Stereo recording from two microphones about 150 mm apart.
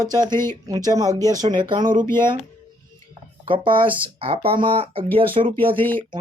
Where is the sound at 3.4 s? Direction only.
35° right (ahead or behind).